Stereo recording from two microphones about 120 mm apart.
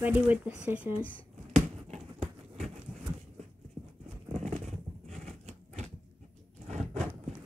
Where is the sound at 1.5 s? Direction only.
70° right (ahead or behind).